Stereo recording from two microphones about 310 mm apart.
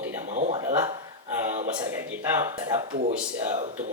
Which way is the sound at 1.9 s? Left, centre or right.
Centre.